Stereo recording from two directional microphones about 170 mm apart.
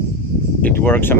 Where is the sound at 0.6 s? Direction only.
10° left (ahead or behind).